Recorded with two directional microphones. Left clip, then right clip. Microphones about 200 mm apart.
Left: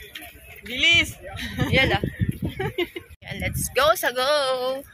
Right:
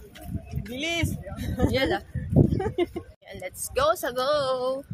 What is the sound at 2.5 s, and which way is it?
Speech, 55° right (ahead or behind).